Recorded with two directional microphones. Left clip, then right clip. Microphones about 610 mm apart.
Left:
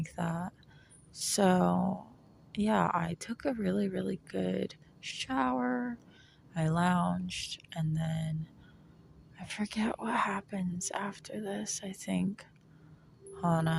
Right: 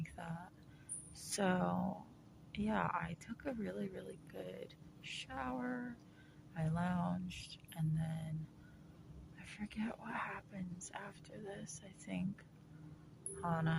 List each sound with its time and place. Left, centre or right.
0.0 s a sound: right
1.4 s speech: right
9.4 s speech: right